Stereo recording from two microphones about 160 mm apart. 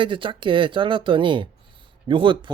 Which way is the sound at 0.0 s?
30° right (ahead or behind).